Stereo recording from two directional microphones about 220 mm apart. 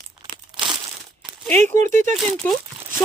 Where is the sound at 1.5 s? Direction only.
10° left (ahead or behind).